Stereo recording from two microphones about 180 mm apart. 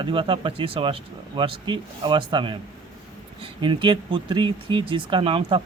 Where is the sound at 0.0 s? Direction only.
30° right (ahead or behind).